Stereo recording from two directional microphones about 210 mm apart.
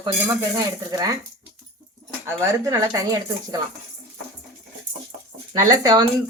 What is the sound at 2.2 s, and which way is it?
Speech, 15° right (ahead or behind).